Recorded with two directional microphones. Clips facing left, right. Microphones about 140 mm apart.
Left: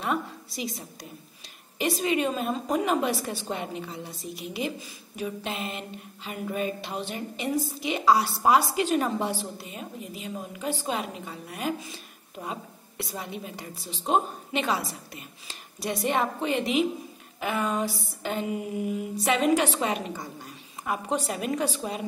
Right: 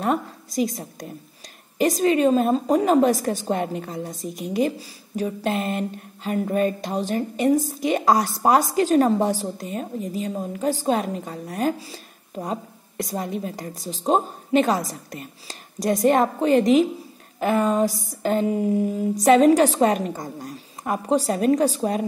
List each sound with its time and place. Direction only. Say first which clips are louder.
0.0 s a woman's voice: right 6 dB; 45° right (ahead or behind)